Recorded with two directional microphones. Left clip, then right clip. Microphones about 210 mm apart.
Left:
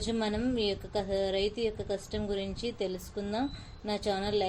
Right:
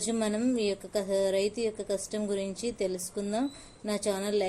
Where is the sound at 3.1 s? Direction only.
20° right (ahead or behind).